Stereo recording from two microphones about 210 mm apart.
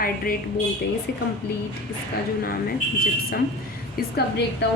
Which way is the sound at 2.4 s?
45° left (ahead or behind).